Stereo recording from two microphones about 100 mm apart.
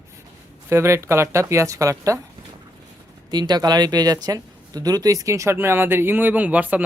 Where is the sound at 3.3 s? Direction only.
45° right (ahead or behind); by 6.8 s 15° right (ahead or behind).